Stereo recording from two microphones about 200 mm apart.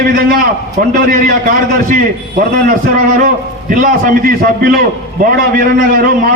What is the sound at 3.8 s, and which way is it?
A man's voice, 40° right (ahead or behind).